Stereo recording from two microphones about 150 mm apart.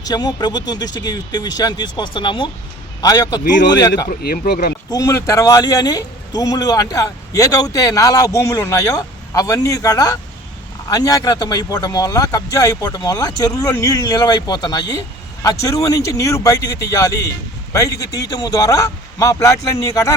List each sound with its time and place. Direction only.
0.0 s speech: 25° left (ahead or behind)
4.1 s speech: 90° left
4.9 s speech: 20° left (ahead or behind)